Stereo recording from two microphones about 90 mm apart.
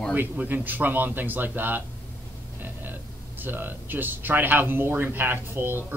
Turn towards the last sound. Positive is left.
turn(degrees=-25)  # may be behind; listen again after turning